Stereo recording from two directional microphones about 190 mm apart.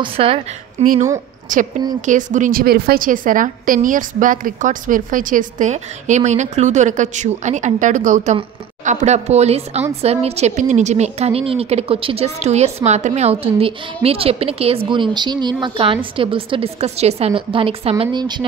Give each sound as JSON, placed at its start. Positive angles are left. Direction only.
{"t": 0.0, "sound": "a woman's voice", "side_deg": -30}
{"t": 1.5, "sound": "a woman's voice", "side_deg": -40}